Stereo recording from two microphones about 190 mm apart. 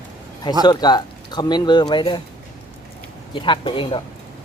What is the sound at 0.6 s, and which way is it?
Speech, 20° left (ahead or behind).